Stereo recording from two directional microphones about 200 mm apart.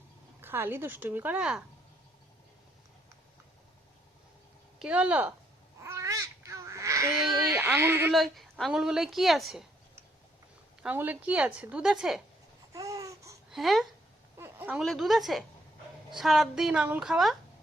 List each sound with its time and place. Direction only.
0.4 s a woman's voice: 10° right (ahead or behind)
4.8 s a woman's voice: 5° right (ahead or behind)
5.8 s babbling: 15° right (ahead or behind)
7.4 s a woman's voice: 10° right (ahead or behind)
10.8 s a woman's voice: 10° right (ahead or behind)
12.7 s babbling: 15° right (ahead or behind)
13.5 s speech: centre (ahead or behind)
14.3 s a woman's voice: 10° right (ahead or behind)